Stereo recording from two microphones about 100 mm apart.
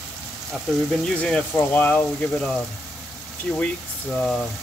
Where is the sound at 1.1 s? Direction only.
5° left (ahead or behind).